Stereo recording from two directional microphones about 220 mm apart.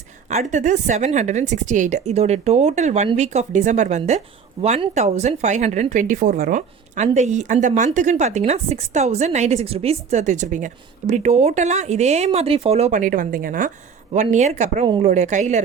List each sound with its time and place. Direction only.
0.3 s a woman's voice: 30° right (ahead or behind)